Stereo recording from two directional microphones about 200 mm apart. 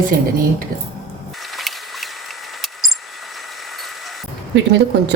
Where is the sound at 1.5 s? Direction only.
Centre (ahead or behind).